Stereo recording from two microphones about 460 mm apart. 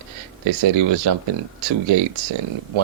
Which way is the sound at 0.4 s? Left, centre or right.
Right.